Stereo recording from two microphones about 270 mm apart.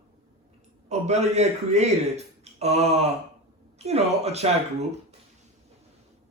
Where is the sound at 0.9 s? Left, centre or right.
Right.